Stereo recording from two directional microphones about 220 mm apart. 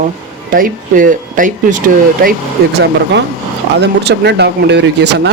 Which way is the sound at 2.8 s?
50° right (ahead or behind).